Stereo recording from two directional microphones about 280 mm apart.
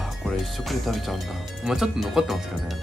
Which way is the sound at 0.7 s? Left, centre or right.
Centre.